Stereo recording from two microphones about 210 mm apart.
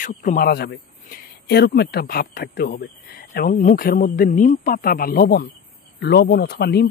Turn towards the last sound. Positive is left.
turn(degrees=50)  # may be behind; listen again after turning